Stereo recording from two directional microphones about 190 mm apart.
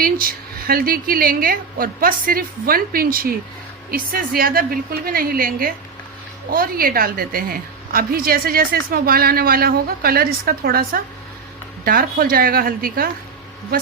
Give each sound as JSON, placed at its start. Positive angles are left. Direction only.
{"t": 0.0, "sound": "a woman's voice", "side_deg": -50}